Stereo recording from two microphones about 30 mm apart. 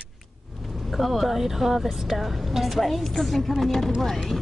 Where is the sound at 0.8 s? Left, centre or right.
Centre.